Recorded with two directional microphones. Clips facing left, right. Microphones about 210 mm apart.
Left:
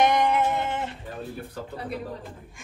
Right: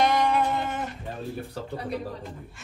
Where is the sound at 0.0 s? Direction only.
20° left (ahead or behind).